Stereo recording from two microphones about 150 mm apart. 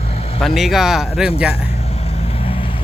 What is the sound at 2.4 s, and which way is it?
Vehicle, 40° left (ahead or behind).